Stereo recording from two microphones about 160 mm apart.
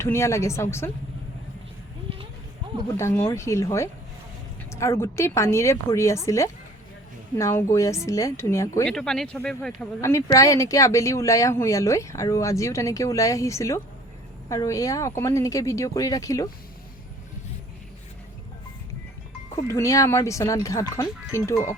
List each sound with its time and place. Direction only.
0.0 s a woman's voice: 15° left (ahead or behind)
3.0 s a woman's voice: 15° left (ahead or behind)
8.9 s speech: 5° left (ahead or behind)
10.0 s speech: 20° left (ahead or behind)
19.5 s speech: 20° left (ahead or behind)